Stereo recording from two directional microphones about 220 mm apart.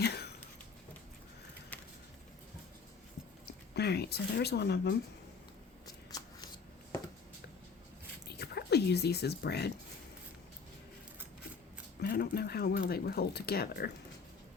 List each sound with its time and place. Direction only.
0.0 s a sound: 50° left (ahead or behind)
3.8 s speech: 45° left (ahead or behind)
6.1 s shuffling cards: 20° left (ahead or behind)
8.4 s speech: 50° left (ahead or behind)
12.0 s speech: 45° left (ahead or behind)